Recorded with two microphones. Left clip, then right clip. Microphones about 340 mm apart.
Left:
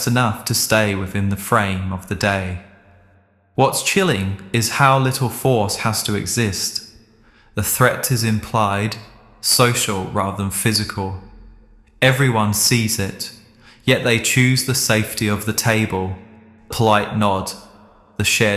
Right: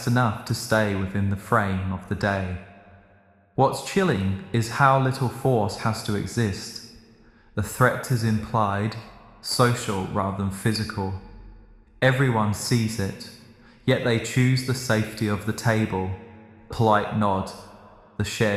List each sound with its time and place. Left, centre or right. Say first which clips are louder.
0.0 s speech: left 5 dB; left
3.5 s speech: left 5 dB; left